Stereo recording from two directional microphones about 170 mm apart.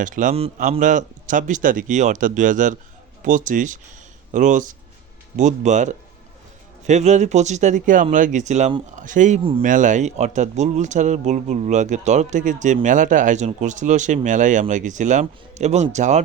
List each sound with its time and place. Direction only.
0.0 s speech: 50° right (ahead or behind)
9.4 s speech: 30° right (ahead or behind)
9.6 s speech: 50° right (ahead or behind)